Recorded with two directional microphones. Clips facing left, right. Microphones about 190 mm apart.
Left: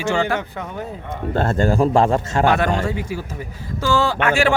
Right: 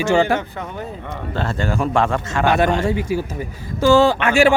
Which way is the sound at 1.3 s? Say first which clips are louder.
Left 5 dB; 45° left (ahead or behind).